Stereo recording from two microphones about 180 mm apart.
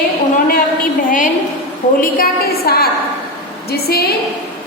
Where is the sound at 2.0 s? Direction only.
55° left (ahead or behind).